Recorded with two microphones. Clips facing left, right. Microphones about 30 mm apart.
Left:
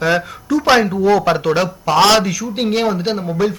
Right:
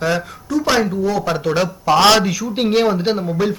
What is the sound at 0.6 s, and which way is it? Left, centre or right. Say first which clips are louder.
Speech: left 4 dB; left.